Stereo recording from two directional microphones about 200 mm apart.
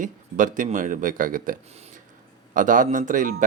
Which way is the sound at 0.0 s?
40° right (ahead or behind).